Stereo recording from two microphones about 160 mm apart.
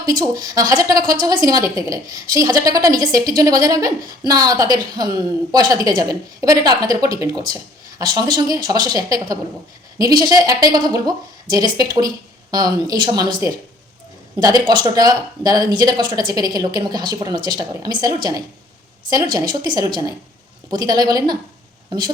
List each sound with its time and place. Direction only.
0.0 s a woman's voice: 25° right (ahead or behind)
14.3 s a woman's voice: 25° right (ahead or behind)